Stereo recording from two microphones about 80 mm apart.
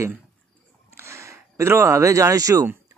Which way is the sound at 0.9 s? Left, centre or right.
Right.